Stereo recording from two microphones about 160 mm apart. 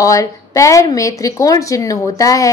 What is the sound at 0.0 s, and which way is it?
Speech, 20° left (ahead or behind).